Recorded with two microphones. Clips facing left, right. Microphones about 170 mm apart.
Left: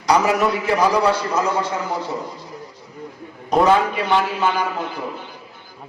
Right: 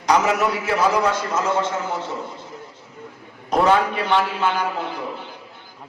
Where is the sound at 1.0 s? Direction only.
35° left (ahead or behind).